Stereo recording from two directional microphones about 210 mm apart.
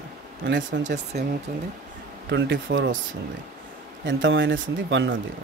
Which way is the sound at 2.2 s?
55° right (ahead or behind).